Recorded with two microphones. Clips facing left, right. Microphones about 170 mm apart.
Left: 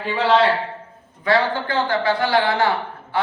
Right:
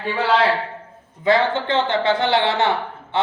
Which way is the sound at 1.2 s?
20° right (ahead or behind).